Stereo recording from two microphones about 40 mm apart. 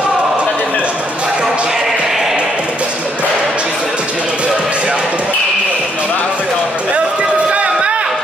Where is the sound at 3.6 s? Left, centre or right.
Right.